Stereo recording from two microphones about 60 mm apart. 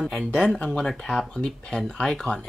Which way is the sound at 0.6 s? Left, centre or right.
Centre.